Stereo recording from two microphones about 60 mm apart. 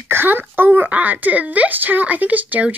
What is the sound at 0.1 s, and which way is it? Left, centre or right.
A woman's voice, right.